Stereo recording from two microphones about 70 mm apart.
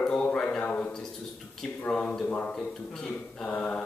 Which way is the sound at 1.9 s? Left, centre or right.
Centre.